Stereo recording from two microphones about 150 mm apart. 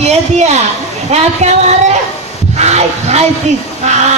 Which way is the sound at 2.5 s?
45° right (ahead or behind).